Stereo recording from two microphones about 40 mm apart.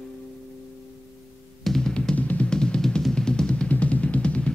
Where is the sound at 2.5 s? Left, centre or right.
Left.